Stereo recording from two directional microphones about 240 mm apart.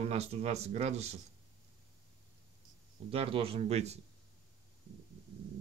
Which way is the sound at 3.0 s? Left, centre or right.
Right.